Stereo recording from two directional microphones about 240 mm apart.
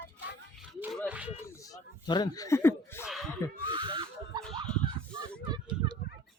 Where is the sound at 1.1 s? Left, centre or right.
Centre.